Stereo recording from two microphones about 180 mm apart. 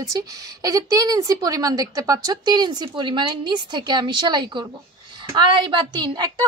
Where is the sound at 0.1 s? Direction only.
20° right (ahead or behind).